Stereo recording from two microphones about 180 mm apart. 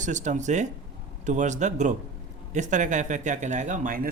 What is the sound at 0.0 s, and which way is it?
Speech, 40° right (ahead or behind).